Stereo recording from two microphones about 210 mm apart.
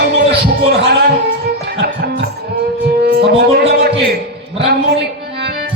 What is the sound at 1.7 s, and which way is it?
Music, 55° right (ahead or behind).